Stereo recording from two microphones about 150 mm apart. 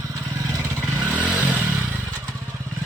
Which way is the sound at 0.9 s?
10° right (ahead or behind).